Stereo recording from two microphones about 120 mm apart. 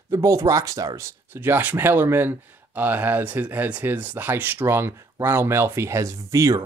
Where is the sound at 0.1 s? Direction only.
25° right (ahead or behind).